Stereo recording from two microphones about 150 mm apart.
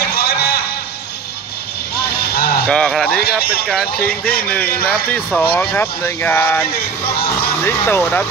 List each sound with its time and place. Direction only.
0.1 s a sound: 90° left
2.3 s a sound: 85° left
2.6 s speech: 5° left (ahead or behind)
3.2 s speech: 90° left
4.0 s speech: 10° left (ahead or behind)
7.6 s speech: 15° left (ahead or behind)